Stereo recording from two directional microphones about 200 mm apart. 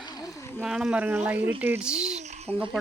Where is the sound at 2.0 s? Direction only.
35° right (ahead or behind).